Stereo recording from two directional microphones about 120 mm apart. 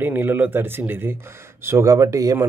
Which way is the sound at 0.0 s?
15° right (ahead or behind).